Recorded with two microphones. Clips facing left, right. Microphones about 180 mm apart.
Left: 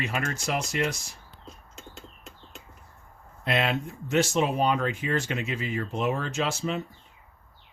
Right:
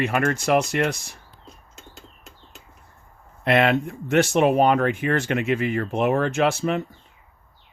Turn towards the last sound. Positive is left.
turn(degrees=-60)  # may be behind; listen again after turning